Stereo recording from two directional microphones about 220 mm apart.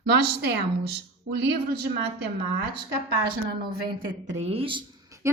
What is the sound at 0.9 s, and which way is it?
Speech, 50° right (ahead or behind).